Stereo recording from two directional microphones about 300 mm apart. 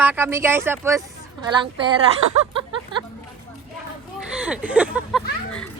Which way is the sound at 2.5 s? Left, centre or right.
Centre.